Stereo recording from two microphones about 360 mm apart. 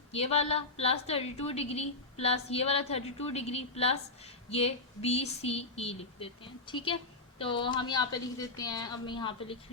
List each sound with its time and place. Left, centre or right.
0.1 s a woman's voice: centre